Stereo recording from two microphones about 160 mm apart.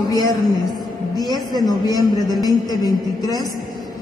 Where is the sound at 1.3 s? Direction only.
25° left (ahead or behind).